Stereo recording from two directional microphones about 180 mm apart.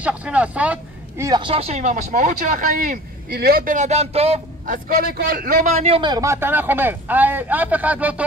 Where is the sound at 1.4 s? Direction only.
35° right (ahead or behind).